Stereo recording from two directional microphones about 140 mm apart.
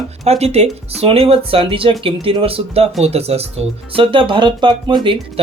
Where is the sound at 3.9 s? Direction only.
35° right (ahead or behind).